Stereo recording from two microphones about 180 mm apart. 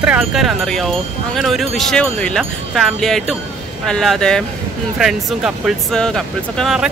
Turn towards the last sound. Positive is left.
turn(degrees=0)  # may be behind; listen again after turning